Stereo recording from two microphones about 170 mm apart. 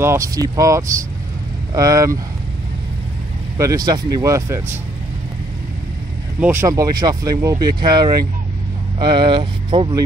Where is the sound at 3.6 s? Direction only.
20° right (ahead or behind).